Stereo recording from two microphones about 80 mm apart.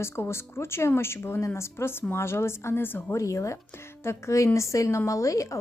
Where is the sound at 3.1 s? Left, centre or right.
Left.